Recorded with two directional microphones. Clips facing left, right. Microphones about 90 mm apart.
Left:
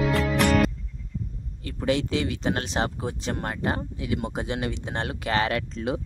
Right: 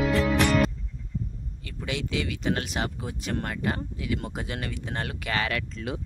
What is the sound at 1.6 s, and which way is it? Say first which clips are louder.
Speech: left 8 dB; 40° left (ahead or behind).